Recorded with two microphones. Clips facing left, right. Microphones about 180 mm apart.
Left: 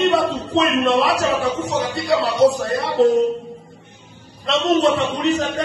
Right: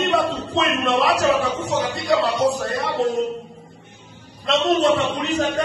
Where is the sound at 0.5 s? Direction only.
30° left (ahead or behind).